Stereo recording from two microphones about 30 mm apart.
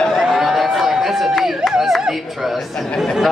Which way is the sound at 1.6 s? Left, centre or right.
Right.